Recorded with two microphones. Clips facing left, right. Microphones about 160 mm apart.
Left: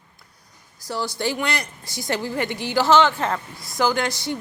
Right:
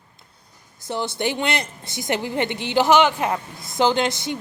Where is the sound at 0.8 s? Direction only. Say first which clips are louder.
Right 2 dB; 20° right (ahead or behind).